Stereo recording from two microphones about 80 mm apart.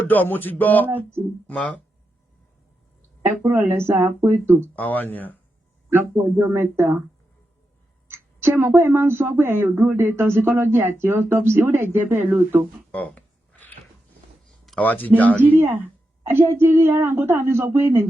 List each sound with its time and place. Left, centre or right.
0.1 s speech: left
0.9 s speech: right
1.5 s speech: centre
3.2 s speech: right
4.7 s speech: left
6.4 s speech: right
8.1 s speech: right
12.9 s a sound: centre
14.8 s speech: left
15.4 s speech: right